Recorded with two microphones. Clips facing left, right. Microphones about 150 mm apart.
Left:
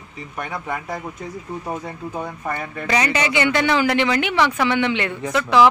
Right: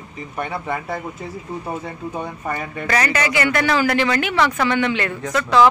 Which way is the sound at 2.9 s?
15° left (ahead or behind).